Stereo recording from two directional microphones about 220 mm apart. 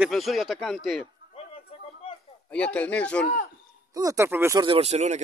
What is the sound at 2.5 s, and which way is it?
Speech, 5° left (ahead or behind).